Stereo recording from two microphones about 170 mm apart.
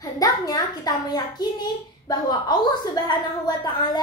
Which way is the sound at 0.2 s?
25° left (ahead or behind).